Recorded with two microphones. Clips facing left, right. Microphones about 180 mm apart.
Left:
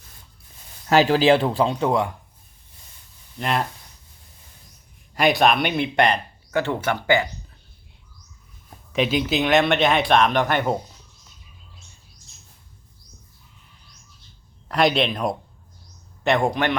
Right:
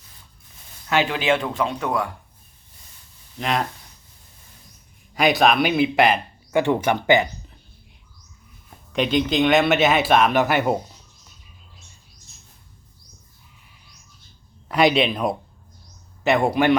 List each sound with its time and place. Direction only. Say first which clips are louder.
0.9 s speech: left 5 dB; 35° left (ahead or behind)
3.3 s speech: even; centre (ahead or behind)
5.1 s speech: right 1 dB; centre (ahead or behind)
6.5 s speech: right 4 dB; 15° right (ahead or behind)
8.9 s speech: right 1 dB; 5° left (ahead or behind)
14.7 s speech: right 2 dB; centre (ahead or behind)